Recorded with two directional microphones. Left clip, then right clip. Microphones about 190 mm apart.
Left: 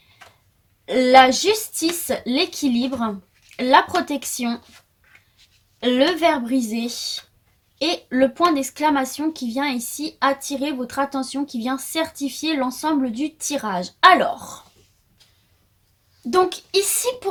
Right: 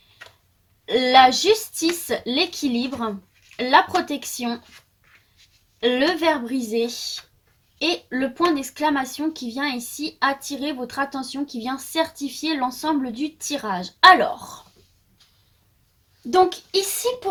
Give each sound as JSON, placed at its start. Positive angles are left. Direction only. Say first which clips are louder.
{"t": 0.9, "sound": "speech", "louder": "left 2 dB", "side_deg": 40}
{"t": 5.8, "sound": "speech", "louder": "left 2 dB", "side_deg": 40}
{"t": 16.3, "sound": "speech", "louder": "even", "side_deg": 40}